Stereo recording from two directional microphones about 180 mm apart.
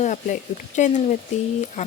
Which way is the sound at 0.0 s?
40° left (ahead or behind).